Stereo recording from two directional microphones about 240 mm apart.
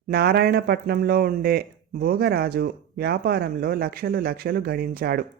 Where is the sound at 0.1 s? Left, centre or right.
Right.